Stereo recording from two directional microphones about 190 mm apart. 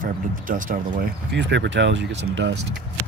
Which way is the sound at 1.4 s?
70° right (ahead or behind).